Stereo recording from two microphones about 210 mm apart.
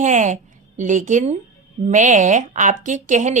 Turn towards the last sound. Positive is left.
turn(degrees=-35)  # may be behind; listen again after turning